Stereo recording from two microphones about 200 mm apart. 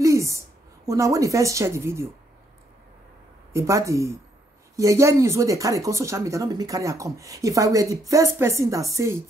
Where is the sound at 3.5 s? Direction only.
15° right (ahead or behind).